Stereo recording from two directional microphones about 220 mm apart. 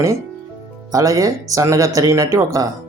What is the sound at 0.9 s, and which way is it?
Speech, 15° right (ahead or behind).